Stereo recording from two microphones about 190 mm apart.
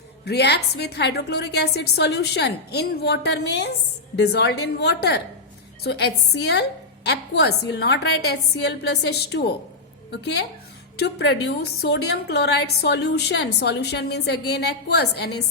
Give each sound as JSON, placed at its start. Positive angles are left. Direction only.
{"t": 0.3, "sound": "a woman's voice", "side_deg": 60}